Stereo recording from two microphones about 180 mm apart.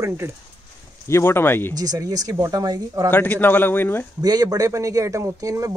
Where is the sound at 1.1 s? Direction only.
15° left (ahead or behind).